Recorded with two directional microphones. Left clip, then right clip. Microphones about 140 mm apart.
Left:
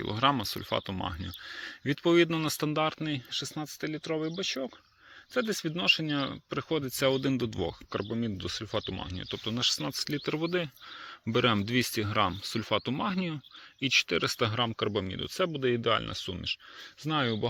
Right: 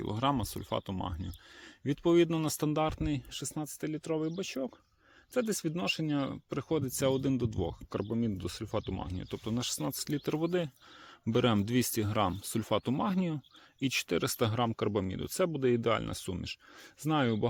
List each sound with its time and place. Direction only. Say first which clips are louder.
0.0 s speech: left 5 dB; 30° right (ahead or behind); by 7.1 s 45° right (ahead or behind)
7.1 s speech: left 2 dB; 25° right (ahead or behind)
8.1 s speech: left 2 dB; 50° right (ahead or behind); by 17.5 s 85° right